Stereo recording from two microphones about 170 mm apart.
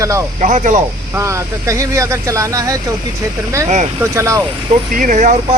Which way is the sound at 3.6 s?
45° right (ahead or behind).